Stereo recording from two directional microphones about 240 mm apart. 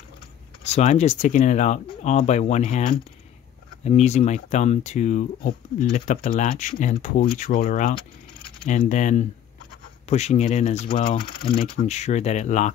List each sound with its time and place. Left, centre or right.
0.7 s speech: left